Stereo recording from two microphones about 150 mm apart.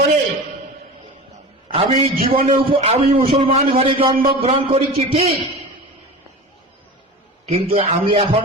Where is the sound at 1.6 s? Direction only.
35° right (ahead or behind).